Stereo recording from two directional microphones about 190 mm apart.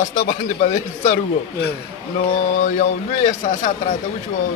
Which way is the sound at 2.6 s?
40° left (ahead or behind).